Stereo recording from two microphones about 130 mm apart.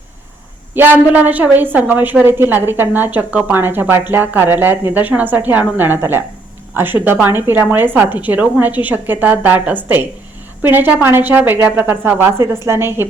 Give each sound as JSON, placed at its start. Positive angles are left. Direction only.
{"t": 0.7, "sound": "a woman's voice", "side_deg": -15}